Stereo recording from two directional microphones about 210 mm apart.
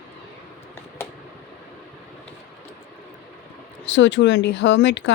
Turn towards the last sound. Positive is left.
turn(degrees=55)  # may be behind; listen again after turning